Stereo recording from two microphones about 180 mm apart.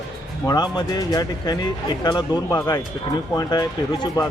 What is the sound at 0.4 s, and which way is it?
A man's voice, 20° left (ahead or behind).